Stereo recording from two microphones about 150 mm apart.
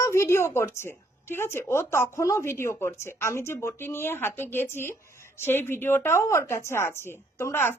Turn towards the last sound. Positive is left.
turn(degrees=15)  # may be behind; listen again after turning